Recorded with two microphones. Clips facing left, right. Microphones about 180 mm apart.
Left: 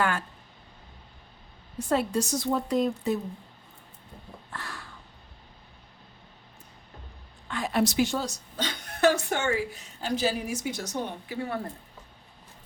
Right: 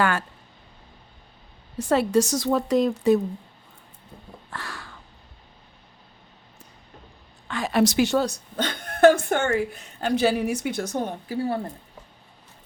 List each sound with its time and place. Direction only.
0.0 s speech: 80° right
1.8 s a woman's voice: 85° right
4.5 s crow: 90° right
7.4 s a woman's voice: 90° right; by 11.3 s 50° right (ahead or behind)